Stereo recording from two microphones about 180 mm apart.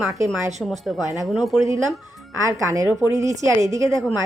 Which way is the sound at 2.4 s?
15° right (ahead or behind).